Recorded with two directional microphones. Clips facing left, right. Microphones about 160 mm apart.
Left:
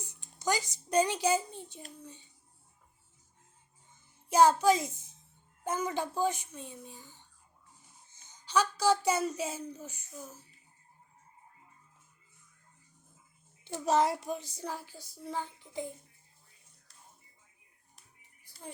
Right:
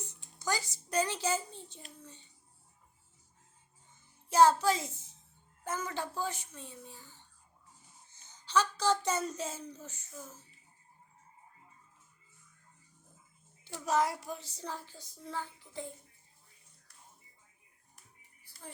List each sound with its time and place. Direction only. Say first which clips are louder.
0.0 s speech: left 4 dB; 15° left (ahead or behind)
2.0 s child singing: left 4 dB; 15° left (ahead or behind)
4.3 s child singing: left 1 dB; 15° left (ahead or behind)
8.1 s speech: left 1 dB; 15° left (ahead or behind)
13.7 s child singing: left 3 dB; 25° left (ahead or behind)
18.4 s music: left 3 dB; 15° left (ahead or behind)